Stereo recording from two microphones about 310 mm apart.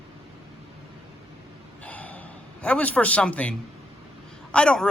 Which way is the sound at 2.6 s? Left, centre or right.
Centre.